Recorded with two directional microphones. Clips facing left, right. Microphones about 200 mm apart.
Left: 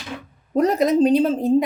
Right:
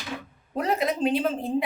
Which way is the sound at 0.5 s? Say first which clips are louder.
Left 9 dB; 40° left (ahead or behind).